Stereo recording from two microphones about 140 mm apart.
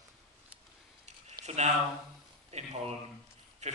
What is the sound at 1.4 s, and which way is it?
A man's voice, 50° right (ahead or behind).